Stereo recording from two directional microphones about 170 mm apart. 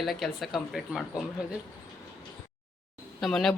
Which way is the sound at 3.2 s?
5° left (ahead or behind).